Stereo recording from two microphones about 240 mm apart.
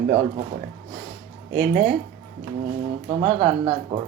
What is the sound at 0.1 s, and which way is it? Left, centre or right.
Speech, right.